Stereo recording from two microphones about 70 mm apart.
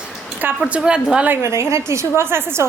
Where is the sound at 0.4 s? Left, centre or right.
Right.